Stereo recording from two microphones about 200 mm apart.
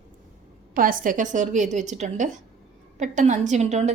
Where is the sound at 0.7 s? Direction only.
45° right (ahead or behind).